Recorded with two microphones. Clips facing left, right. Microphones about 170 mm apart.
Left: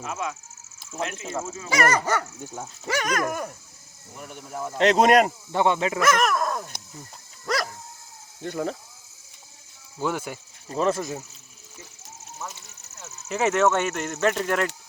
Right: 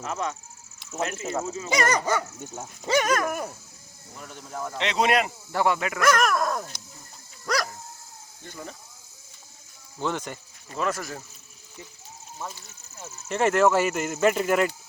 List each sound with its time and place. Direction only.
0.0 s speech: 5° left (ahead or behind)
0.9 s speech: 5° right (ahead or behind)
1.6 s speech: 20° right (ahead or behind)
3.2 s dog: 10° right (ahead or behind)
4.1 s speech: 10° left (ahead or behind)
4.8 s speech: 45° left (ahead or behind)
5.5 s speech: 20° left (ahead or behind)
6.0 s speech: centre (ahead or behind)
7.4 s dog: centre (ahead or behind)
8.4 s speech: 65° left (ahead or behind)
10.0 s speech: 5° left (ahead or behind)
10.7 s speech: 30° left (ahead or behind)
13.2 s speech: centre (ahead or behind)